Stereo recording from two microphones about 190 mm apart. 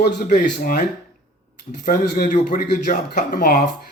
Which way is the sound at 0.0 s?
45° left (ahead or behind).